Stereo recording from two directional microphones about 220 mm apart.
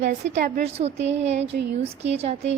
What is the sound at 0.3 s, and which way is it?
A woman's voice, 35° right (ahead or behind).